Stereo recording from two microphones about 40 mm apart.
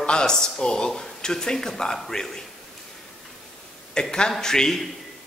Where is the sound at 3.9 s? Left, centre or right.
Left.